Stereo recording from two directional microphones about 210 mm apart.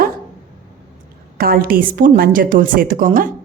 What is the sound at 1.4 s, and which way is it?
A woman's voice, 45° right (ahead or behind).